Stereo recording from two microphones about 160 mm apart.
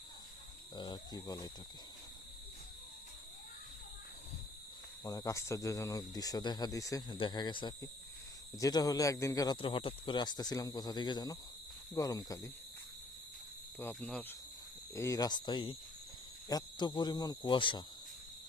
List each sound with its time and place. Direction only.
0.8 s speech: 25° left (ahead or behind)
5.0 s speech: 20° left (ahead or behind)
9.6 s speech: 35° left (ahead or behind)
13.7 s speech: 10° left (ahead or behind)
14.9 s speech: 20° left (ahead or behind)